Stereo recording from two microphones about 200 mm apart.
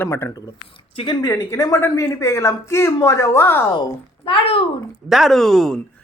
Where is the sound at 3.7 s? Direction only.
25° left (ahead or behind).